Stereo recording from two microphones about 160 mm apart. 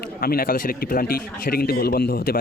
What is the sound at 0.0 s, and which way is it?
A man's voice, 70° left (ahead or behind).